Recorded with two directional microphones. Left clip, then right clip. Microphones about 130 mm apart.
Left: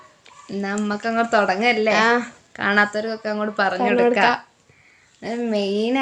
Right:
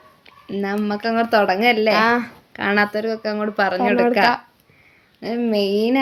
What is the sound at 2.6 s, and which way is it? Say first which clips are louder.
Speech: even; 30° right (ahead or behind).